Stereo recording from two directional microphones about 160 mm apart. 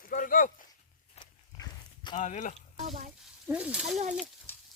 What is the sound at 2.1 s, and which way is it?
Speech, 50° left (ahead or behind).